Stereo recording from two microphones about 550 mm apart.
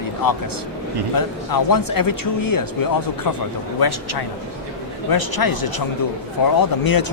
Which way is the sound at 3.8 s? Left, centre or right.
Left.